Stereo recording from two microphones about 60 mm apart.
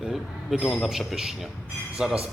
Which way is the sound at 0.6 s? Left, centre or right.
Centre.